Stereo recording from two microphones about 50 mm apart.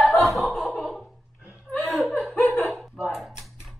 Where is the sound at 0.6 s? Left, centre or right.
Centre.